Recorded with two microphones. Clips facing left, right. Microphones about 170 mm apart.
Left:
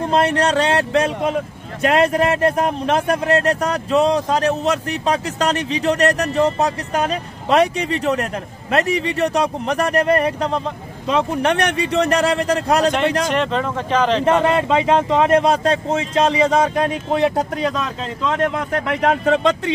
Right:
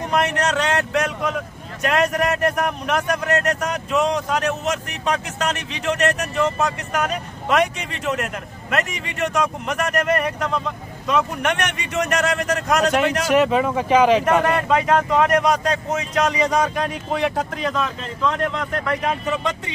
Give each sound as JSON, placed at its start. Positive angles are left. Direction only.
{"t": 0.0, "sound": "speech", "side_deg": 30}
{"t": 13.3, "sound": "speech", "side_deg": -10}
{"t": 14.4, "sound": "speech", "side_deg": 25}
{"t": 18.7, "sound": "speech", "side_deg": 75}